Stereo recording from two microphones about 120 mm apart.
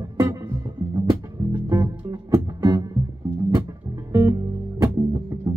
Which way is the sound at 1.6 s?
25° right (ahead or behind).